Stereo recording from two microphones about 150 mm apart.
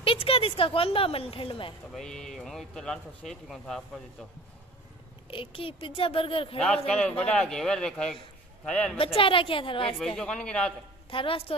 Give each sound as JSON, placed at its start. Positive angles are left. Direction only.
{"t": 0.0, "sound": "speech", "side_deg": 40}
{"t": 2.0, "sound": "speech", "side_deg": 5}
{"t": 5.3, "sound": "speech", "side_deg": 35}
{"t": 6.9, "sound": "speech", "side_deg": 5}
{"t": 8.9, "sound": "speech", "side_deg": 35}
{"t": 9.9, "sound": "speech", "side_deg": 5}
{"t": 11.1, "sound": "speech", "side_deg": 35}